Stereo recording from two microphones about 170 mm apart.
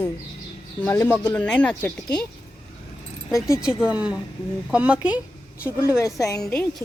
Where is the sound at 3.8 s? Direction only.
5° right (ahead or behind).